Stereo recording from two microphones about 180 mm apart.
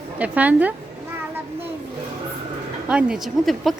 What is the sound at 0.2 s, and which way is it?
Speech, 10° right (ahead or behind).